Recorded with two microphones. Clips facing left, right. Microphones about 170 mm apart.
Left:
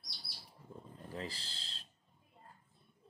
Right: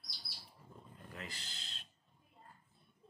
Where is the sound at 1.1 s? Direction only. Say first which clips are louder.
Left 6 dB; 30° left (ahead or behind).